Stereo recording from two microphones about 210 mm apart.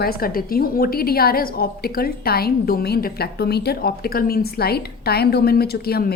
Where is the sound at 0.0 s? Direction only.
45° left (ahead or behind).